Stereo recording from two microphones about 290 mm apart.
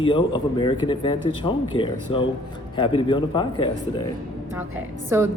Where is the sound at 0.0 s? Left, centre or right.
Centre.